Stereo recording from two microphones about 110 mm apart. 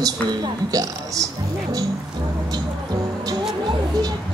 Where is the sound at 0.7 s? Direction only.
30° right (ahead or behind).